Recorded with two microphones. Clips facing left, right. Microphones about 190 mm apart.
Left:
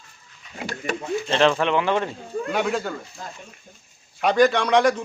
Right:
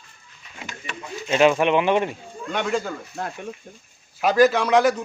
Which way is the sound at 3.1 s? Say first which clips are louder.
Right 7 dB; 65° right (ahead or behind).